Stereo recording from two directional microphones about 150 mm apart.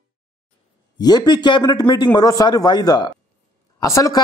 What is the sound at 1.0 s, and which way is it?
A man's voice, 30° left (ahead or behind).